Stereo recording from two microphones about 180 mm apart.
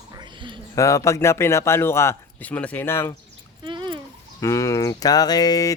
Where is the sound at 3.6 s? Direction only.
25° right (ahead or behind).